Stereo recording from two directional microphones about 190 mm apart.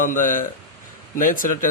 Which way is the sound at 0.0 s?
45° left (ahead or behind).